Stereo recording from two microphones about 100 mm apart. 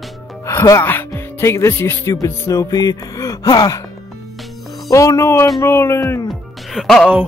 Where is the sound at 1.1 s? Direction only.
25° left (ahead or behind).